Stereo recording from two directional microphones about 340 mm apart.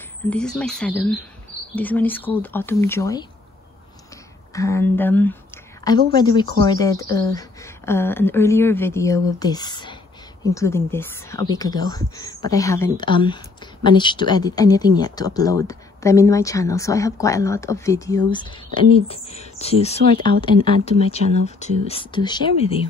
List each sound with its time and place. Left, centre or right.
0.3 s speech: centre
4.6 s speech: centre
21.5 s speech: centre